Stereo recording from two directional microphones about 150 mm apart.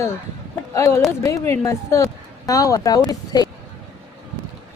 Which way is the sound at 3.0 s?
25° left (ahead or behind).